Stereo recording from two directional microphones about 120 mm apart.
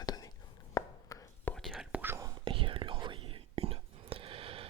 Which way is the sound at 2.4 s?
45° right (ahead or behind).